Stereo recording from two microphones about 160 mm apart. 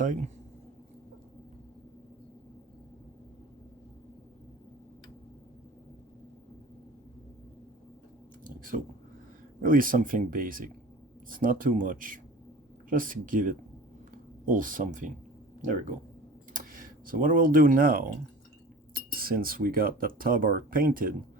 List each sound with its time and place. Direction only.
0.0 s speech: 55° right (ahead or behind)
8.4 s a sound: 60° right (ahead or behind)
9.6 s speech: 60° right (ahead or behind)
16.5 s speech: 60° right (ahead or behind)